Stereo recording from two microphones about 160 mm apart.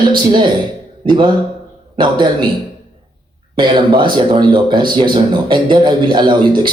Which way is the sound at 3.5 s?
30° right (ahead or behind).